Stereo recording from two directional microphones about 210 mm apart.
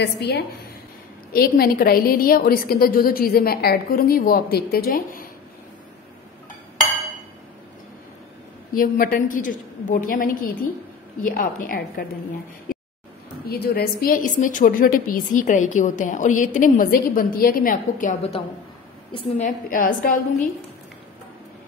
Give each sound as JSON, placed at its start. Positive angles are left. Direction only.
{"t": 0.0, "sound": "a woman's voice", "side_deg": 50}
{"t": 8.7, "sound": "a woman's voice", "side_deg": 45}
{"t": 12.7, "sound": "a sound", "side_deg": 45}
{"t": 13.5, "sound": "a woman's voice", "side_deg": 45}